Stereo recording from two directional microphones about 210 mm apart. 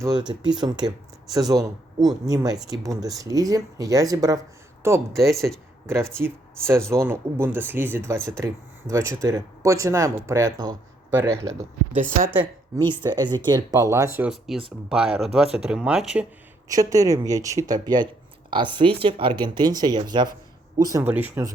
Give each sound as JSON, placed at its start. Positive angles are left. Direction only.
{"t": 0.0, "sound": "a woman's voice", "side_deg": -20}
{"t": 16.6, "sound": "speech", "side_deg": -15}